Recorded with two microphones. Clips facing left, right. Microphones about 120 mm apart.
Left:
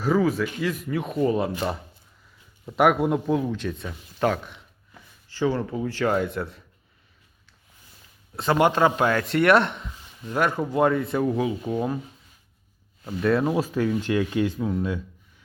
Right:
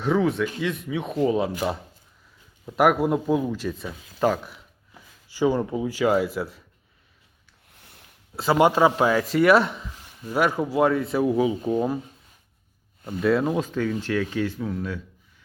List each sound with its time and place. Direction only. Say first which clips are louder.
0.0 s speech: even; centre (ahead or behind)
7.7 s a sound: right 3 dB; 70° right (ahead or behind)
8.4 s a man's voice: right 2 dB; 5° right (ahead or behind)
13.1 s speech: even; centre (ahead or behind); by 15.0 s 15° left (ahead or behind)